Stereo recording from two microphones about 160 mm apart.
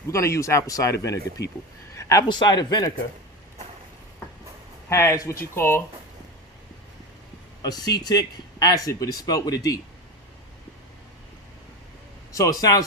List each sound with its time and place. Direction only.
0.1 s speech: 20° left (ahead or behind)
4.9 s speech: 20° left (ahead or behind)
7.6 s speech: 25° left (ahead or behind)
12.3 s speech: 20° left (ahead or behind)